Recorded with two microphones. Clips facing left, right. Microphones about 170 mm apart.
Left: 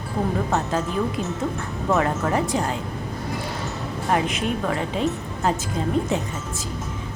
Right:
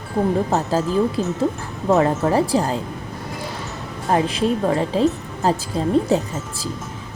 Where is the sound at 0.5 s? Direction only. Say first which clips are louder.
Right 4 dB; 35° right (ahead or behind).